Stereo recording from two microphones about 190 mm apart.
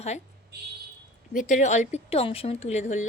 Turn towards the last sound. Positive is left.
turn(degrees=40)  # may be behind; listen again after turning